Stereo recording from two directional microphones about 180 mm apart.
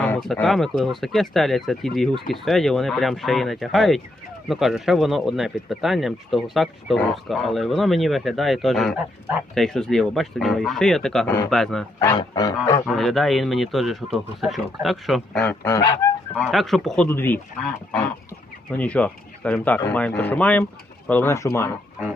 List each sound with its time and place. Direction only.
0.0 s speech: 5° left (ahead or behind)
11.9 s speech: 25° left (ahead or behind)
12.8 s speech: centre (ahead or behind)
15.6 s speech: 15° left (ahead or behind)
16.3 s speech: 5° left (ahead or behind)